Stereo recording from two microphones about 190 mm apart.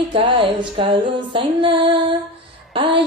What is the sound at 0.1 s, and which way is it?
Music, 30° right (ahead or behind).